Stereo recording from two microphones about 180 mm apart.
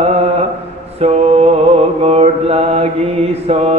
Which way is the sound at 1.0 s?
35° right (ahead or behind).